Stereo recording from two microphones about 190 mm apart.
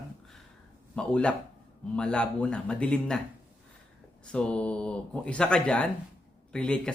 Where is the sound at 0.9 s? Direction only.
5° left (ahead or behind).